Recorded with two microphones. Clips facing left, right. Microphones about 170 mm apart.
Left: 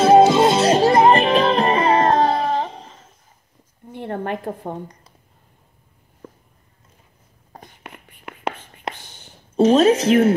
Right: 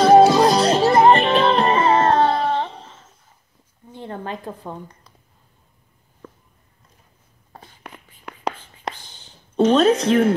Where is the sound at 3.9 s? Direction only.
60° left (ahead or behind).